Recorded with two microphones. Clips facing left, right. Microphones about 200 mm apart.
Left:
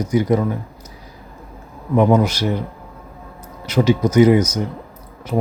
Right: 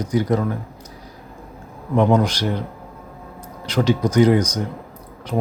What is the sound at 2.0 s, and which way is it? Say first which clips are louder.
Speech: left 2 dB; 10° left (ahead or behind).